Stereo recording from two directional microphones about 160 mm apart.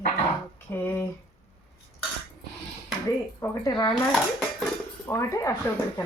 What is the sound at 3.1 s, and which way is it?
Speech, 20° left (ahead or behind).